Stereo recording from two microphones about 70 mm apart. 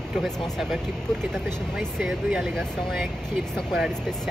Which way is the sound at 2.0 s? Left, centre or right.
Centre.